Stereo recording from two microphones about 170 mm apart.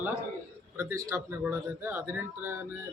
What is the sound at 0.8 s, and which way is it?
A man's voice, 15° right (ahead or behind).